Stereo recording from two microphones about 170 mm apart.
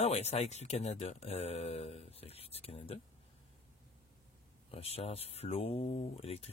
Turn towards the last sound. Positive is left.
turn(degrees=35)  # may be behind; listen again after turning